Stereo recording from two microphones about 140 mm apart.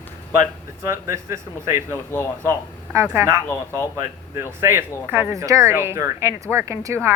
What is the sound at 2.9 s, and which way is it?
Speech, 20° right (ahead or behind).